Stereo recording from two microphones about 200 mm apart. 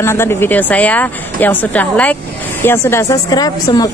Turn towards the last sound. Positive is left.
turn(degrees=20)  # may be behind; listen again after turning